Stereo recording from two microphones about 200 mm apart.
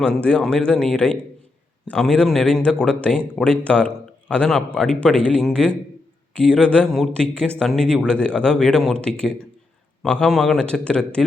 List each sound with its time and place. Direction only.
0.0 s speech: 5° left (ahead or behind)